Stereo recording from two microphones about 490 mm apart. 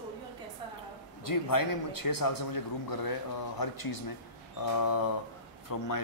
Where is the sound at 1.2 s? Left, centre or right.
Left.